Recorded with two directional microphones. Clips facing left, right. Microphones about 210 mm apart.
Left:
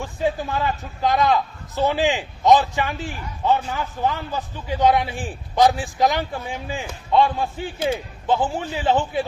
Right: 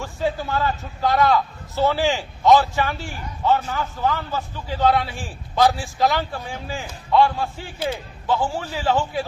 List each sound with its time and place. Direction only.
0.0 s a man's voice: 15° left (ahead or behind)